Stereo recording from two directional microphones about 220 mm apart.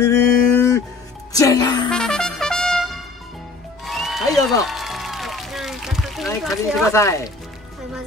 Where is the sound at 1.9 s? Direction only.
5° left (ahead or behind).